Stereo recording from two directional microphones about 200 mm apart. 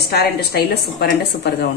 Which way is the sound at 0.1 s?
50° left (ahead or behind).